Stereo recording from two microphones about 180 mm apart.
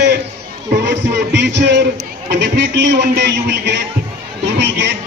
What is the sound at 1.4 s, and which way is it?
Speech, 75° right (ahead or behind).